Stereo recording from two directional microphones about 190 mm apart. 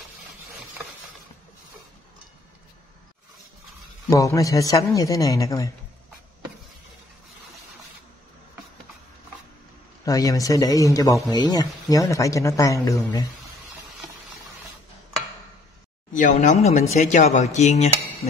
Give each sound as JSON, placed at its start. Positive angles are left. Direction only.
{"t": 4.1, "sound": "a man's voice", "side_deg": 15}
{"t": 10.0, "sound": "a man's voice", "side_deg": 15}
{"t": 16.1, "sound": "speech", "side_deg": 40}